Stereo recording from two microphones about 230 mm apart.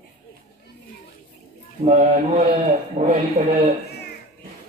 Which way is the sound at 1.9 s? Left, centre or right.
Right.